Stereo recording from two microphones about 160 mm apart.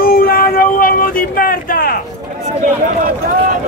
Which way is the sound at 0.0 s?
65° left (ahead or behind).